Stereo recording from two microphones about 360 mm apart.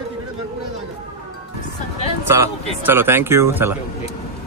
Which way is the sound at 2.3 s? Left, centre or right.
Centre.